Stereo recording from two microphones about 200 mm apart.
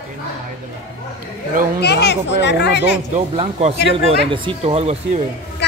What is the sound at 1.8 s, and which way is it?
A child's voice, 55° left (ahead or behind).